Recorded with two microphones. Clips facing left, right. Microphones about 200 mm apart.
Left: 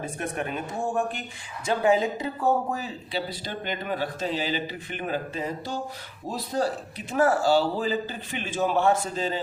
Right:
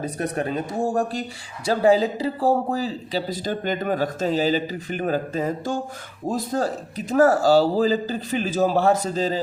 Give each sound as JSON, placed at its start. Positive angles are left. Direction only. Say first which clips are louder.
{"t": 0.0, "sound": "speech", "louder": "right 5 dB", "side_deg": -35}